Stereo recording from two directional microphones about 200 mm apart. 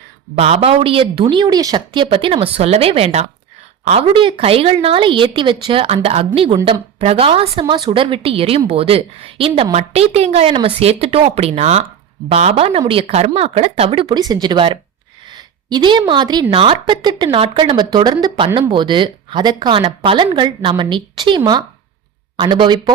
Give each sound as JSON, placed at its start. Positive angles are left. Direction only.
{"t": 0.3, "sound": "a woman's voice", "side_deg": -30}